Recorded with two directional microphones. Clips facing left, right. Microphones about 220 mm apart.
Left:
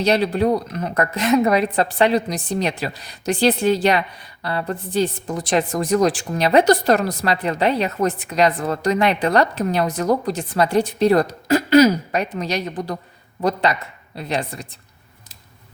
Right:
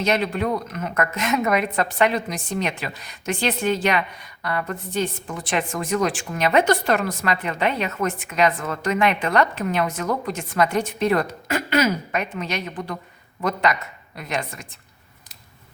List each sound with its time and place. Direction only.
0.0 s a woman's voice: 35° left (ahead or behind)